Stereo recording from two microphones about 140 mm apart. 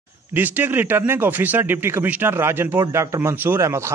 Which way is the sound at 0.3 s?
15° right (ahead or behind).